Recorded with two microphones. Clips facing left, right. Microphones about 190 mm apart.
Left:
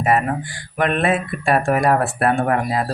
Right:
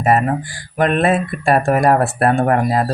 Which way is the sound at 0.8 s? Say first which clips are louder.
Right 3 dB; 35° right (ahead or behind).